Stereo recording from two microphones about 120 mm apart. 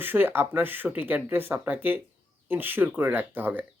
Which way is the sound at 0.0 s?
15° right (ahead or behind).